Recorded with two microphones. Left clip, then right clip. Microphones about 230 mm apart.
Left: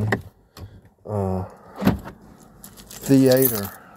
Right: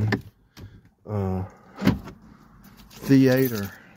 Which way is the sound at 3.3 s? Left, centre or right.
Right.